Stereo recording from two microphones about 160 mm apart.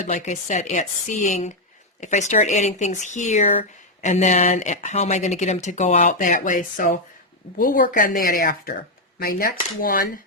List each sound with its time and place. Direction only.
0.1 s a woman's voice: 50° left (ahead or behind); by 10.2 s 65° left (ahead or behind)